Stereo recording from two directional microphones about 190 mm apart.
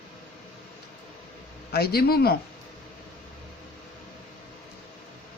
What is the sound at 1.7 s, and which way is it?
Speech, 55° left (ahead or behind).